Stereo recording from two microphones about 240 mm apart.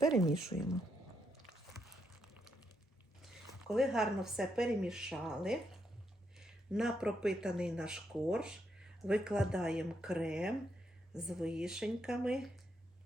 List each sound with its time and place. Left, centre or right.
0.0 s speech: centre
1.8 s a sound: centre
3.7 s speech: centre